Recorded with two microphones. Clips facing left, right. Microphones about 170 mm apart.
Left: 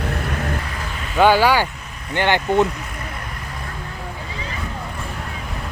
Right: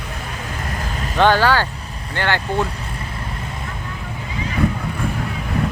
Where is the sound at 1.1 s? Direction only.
10° left (ahead or behind).